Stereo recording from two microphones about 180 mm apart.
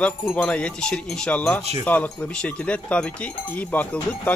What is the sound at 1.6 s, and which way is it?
Speech, 35° right (ahead or behind).